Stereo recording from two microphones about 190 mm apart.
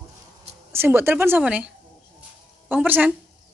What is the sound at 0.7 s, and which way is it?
Speech, 10° right (ahead or behind).